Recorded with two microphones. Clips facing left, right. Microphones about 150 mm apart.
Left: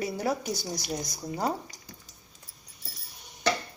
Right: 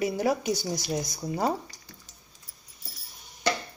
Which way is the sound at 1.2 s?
20° right (ahead or behind).